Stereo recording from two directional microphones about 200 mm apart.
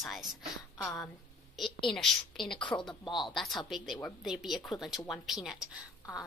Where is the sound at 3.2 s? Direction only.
Centre (ahead or behind).